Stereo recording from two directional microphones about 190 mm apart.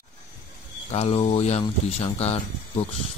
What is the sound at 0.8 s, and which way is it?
Speech, 35° left (ahead or behind).